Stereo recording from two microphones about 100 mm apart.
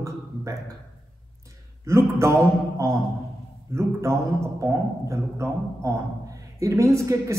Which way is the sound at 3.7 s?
30° right (ahead or behind).